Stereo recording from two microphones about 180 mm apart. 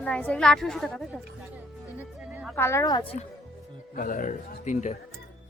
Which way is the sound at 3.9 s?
50° left (ahead or behind).